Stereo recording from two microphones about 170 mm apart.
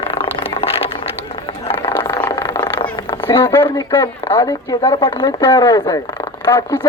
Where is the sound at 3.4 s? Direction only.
10° left (ahead or behind).